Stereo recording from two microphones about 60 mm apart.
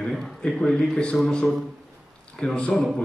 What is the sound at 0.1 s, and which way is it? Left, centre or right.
A man's voice, centre.